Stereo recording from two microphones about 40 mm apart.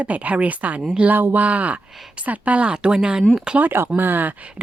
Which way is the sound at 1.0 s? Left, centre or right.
Right.